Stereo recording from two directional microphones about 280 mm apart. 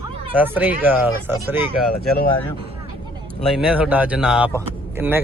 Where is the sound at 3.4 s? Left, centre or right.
Centre.